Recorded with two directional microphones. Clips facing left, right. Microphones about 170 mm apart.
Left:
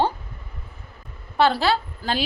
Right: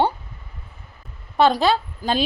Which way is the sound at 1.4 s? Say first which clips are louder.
Right 2 dB; 20° right (ahead or behind).